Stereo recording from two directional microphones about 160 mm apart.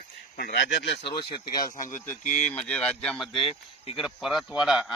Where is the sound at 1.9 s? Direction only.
55° left (ahead or behind).